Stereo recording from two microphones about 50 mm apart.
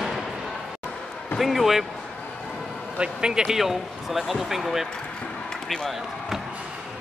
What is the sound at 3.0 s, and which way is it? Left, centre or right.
Speech, centre.